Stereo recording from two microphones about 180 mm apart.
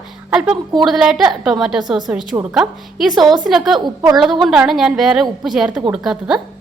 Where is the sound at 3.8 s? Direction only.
15° right (ahead or behind).